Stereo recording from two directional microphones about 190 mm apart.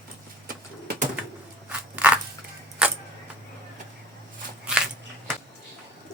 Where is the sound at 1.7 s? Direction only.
5° right (ahead or behind).